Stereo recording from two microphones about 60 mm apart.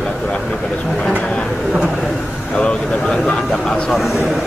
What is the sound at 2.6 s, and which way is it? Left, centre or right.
Speech, centre.